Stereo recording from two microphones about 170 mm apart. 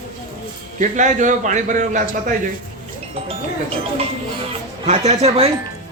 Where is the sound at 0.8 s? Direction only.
50° right (ahead or behind).